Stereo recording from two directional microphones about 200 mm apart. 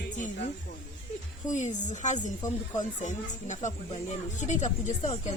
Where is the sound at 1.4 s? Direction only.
35° left (ahead or behind).